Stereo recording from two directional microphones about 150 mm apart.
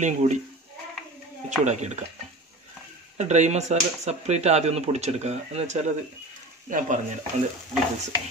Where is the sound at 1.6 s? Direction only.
50° right (ahead or behind).